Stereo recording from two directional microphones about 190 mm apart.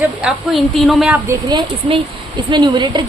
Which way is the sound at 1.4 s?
25° right (ahead or behind).